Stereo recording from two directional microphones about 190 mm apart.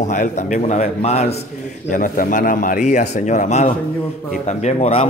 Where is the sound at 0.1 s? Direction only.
40° left (ahead or behind).